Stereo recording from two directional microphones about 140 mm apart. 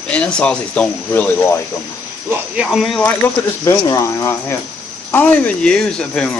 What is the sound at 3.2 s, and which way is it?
Speech, 15° left (ahead or behind).